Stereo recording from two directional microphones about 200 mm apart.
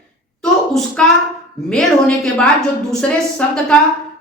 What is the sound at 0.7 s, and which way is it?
A woman's voice, centre (ahead or behind).